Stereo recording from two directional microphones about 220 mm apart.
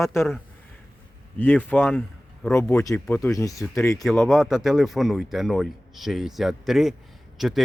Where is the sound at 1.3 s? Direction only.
10° left (ahead or behind).